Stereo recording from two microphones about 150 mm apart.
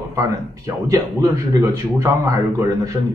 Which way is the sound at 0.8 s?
20° right (ahead or behind).